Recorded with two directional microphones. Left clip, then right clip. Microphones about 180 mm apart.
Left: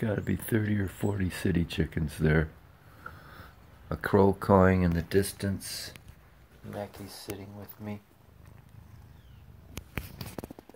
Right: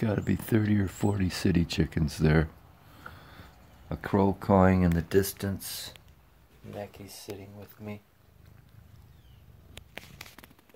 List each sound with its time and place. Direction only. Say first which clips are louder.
0.0 s speech: right 1 dB; 25° right (ahead or behind)
3.0 s a sound: left 1 dB; 15° right (ahead or behind)
3.9 s speech: left 3 dB; 10° right (ahead or behind)
4.6 s speech: even; 30° right (ahead or behind)
6.9 s speech: left 2 dB; 5° right (ahead or behind)